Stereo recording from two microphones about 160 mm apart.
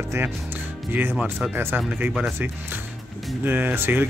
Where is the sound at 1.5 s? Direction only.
10° right (ahead or behind).